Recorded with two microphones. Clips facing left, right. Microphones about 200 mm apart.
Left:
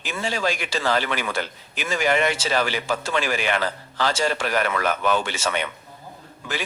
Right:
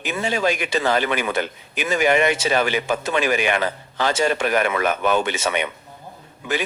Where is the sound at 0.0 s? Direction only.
20° right (ahead or behind).